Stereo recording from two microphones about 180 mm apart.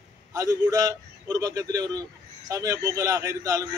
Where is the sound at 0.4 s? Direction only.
20° right (ahead or behind).